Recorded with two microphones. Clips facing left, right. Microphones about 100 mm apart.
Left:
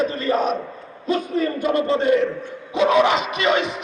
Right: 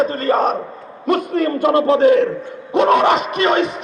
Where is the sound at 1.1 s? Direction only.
65° right (ahead or behind).